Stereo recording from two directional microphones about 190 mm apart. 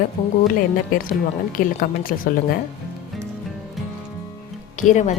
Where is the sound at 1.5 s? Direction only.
50° left (ahead or behind).